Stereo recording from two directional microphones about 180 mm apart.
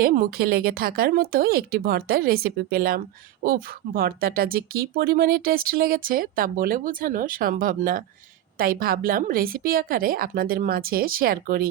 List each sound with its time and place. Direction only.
0.0 s speech: 55° right (ahead or behind)